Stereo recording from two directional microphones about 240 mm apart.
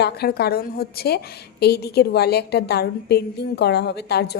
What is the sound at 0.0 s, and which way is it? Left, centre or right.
A woman's voice, left.